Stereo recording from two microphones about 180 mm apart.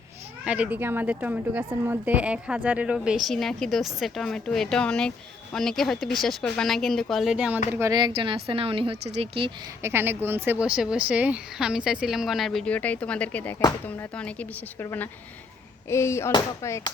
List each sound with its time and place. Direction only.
0.4 s a woman's voice: 5° right (ahead or behind); by 9.5 s 30° right (ahead or behind)
9.8 s speech: 10° right (ahead or behind); by 16.9 s 15° left (ahead or behind)